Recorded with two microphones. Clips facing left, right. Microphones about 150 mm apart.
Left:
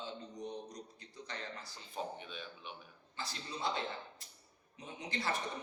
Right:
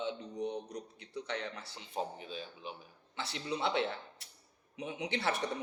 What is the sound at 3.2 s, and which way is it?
Speech, 70° right (ahead or behind).